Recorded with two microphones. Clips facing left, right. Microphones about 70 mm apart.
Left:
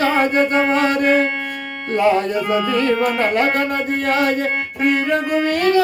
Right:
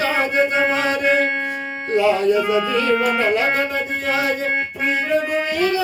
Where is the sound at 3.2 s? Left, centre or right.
Left.